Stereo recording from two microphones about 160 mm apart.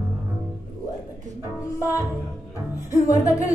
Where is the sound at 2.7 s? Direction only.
20° left (ahead or behind).